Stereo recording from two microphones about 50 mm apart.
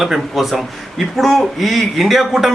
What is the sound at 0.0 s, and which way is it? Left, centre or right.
Speech, centre.